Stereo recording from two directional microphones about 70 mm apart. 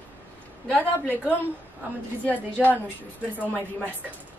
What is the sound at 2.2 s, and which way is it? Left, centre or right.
Speech, left.